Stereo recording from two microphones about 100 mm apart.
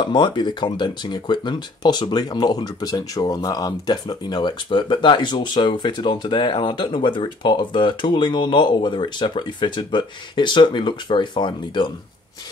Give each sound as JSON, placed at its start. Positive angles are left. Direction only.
{"t": 0.0, "sound": "speech", "side_deg": 50}